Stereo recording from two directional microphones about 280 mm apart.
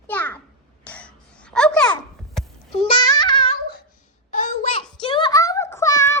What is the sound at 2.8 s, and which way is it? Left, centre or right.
Babbling, centre.